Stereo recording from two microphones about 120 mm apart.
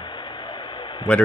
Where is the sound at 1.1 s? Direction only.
10° left (ahead or behind).